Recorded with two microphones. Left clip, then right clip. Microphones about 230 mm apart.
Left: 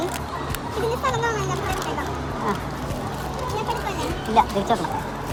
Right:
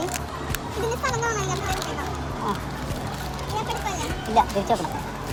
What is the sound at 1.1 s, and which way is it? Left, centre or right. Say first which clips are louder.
Speech: left 2 dB; right.